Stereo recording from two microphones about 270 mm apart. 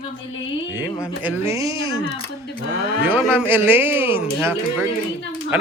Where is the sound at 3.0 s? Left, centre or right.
Centre.